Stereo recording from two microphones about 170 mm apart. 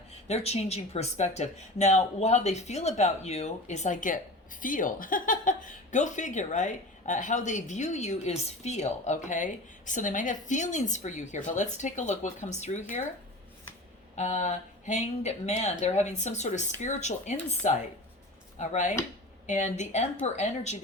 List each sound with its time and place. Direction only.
0.3 s speech: 40° left (ahead or behind)
14.2 s speech: 45° left (ahead or behind)